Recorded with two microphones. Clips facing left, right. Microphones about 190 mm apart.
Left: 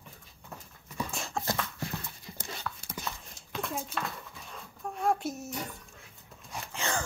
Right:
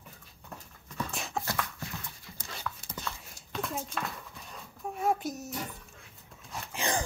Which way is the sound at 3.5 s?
Centre (ahead or behind).